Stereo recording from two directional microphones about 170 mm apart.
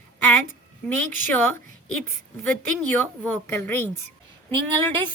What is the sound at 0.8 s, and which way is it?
Speech, 10° left (ahead or behind).